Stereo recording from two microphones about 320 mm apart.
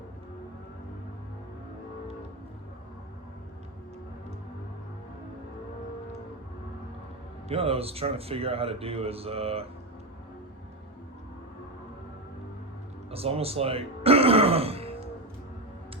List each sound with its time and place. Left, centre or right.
7.4 s speech: centre
13.1 s speech: centre